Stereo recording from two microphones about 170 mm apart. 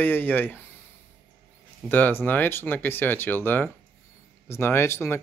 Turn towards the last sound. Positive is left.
turn(degrees=15)  # may be behind; listen again after turning